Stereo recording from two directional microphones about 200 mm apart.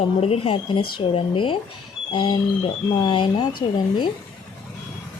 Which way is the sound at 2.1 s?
25° left (ahead or behind).